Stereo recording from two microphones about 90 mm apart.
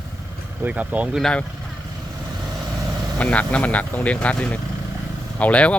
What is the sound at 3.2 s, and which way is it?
Speech, 15° left (ahead or behind).